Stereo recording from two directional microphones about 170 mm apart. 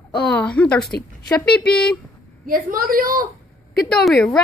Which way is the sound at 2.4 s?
55° right (ahead or behind).